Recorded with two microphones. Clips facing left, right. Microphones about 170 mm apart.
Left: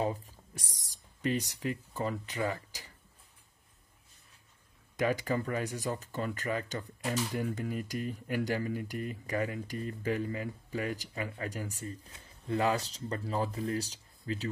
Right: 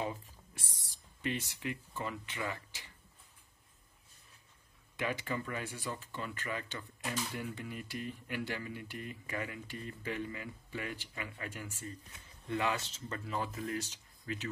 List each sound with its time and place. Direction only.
0.0 s a sound: 40° left (ahead or behind)
1.2 s speech: 40° left (ahead or behind)
4.9 s speech: 40° left (ahead or behind)